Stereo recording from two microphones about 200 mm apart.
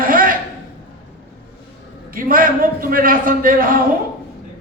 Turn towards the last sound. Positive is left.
turn(degrees=-45)  # may be behind; listen again after turning